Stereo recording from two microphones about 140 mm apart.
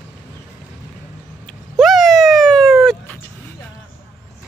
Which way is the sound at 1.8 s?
Centre (ahead or behind).